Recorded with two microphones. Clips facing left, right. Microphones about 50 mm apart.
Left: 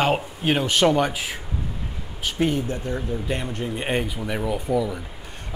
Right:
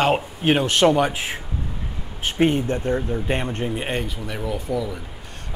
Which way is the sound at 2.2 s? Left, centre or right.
Right.